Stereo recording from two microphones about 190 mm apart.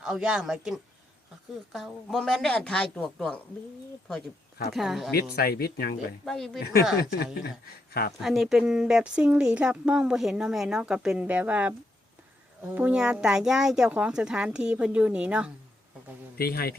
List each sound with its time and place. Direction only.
0.0 s speech: 5° right (ahead or behind)
4.7 s speech: centre (ahead or behind)
5.1 s speech: 55° left (ahead or behind)
6.2 s speech: centre (ahead or behind)
7.0 s speech: 55° left (ahead or behind)
8.2 s speech: centre (ahead or behind)
16.4 s speech: 55° left (ahead or behind)